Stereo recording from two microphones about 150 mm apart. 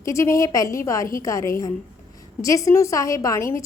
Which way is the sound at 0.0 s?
20° left (ahead or behind).